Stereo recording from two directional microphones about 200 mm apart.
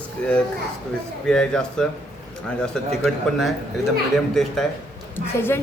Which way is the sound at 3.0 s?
Centre (ahead or behind).